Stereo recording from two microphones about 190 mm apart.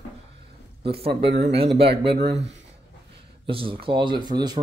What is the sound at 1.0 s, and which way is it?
Speech, 30° right (ahead or behind).